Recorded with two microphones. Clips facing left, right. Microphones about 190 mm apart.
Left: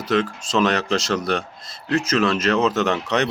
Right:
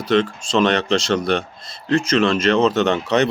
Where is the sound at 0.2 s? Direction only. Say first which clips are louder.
Right 3 dB; 30° right (ahead or behind).